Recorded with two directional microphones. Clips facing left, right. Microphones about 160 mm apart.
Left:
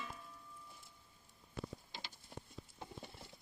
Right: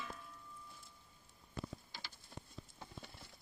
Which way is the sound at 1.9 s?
20° left (ahead or behind).